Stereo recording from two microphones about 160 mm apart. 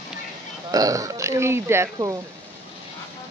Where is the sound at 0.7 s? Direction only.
20° right (ahead or behind).